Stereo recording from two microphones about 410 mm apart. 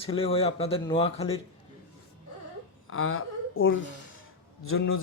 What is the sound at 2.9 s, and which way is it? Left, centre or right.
A woman's voice, left.